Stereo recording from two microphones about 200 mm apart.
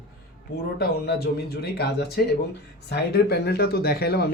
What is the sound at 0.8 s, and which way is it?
Speech, 55° left (ahead or behind).